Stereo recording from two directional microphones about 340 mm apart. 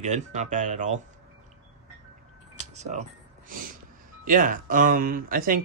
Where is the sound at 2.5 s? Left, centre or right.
Centre.